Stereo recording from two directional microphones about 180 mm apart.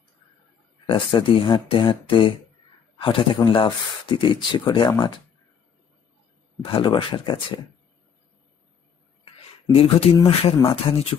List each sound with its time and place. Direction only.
0.8 s speech: 30° left (ahead or behind)
6.6 s speech: 25° left (ahead or behind)
9.8 s speech: 30° left (ahead or behind)